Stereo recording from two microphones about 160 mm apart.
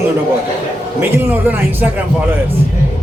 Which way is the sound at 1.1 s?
10° right (ahead or behind).